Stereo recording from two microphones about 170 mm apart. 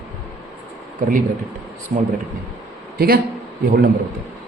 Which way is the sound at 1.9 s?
50° right (ahead or behind).